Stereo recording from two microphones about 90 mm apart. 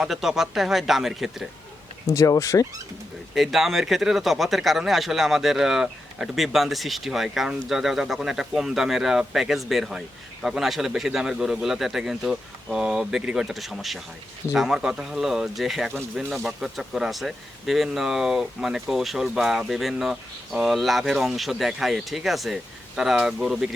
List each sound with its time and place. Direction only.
0.1 s speech: 5° right (ahead or behind)
2.0 s speech: 40° left (ahead or behind)
3.3 s speech: 5° right (ahead or behind)